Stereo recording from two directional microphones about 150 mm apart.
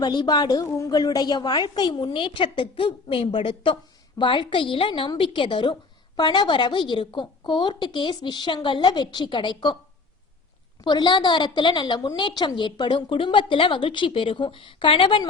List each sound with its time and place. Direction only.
0.0 s a woman's voice: 30° left (ahead or behind)
10.8 s a woman's voice: 30° left (ahead or behind)